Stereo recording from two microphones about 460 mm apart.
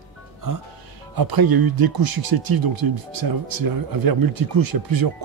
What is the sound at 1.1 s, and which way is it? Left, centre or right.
Speech, right.